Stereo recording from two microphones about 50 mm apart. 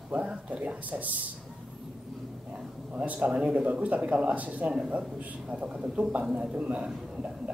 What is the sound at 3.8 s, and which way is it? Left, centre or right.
A man's voice, right.